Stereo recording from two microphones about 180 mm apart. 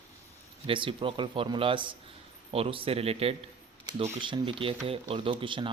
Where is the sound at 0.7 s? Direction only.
30° right (ahead or behind).